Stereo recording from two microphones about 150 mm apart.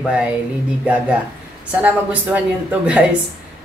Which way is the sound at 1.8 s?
10° right (ahead or behind).